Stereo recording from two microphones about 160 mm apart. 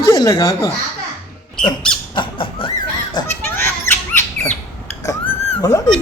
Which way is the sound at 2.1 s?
30° left (ahead or behind).